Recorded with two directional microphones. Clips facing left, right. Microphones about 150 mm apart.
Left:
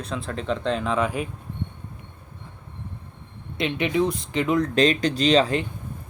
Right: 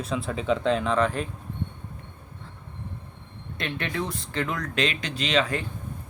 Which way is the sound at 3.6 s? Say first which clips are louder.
Left 8 dB; 20° left (ahead or behind).